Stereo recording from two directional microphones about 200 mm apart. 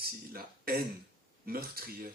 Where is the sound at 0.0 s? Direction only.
50° right (ahead or behind).